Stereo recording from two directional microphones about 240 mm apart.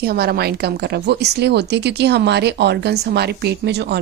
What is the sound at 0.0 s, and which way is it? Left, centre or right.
A woman's voice, right.